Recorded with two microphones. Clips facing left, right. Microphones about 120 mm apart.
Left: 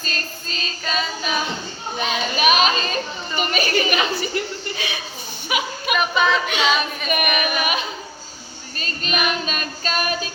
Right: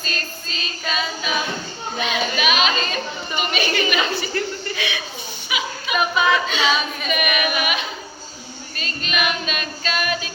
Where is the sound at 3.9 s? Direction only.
20° left (ahead or behind).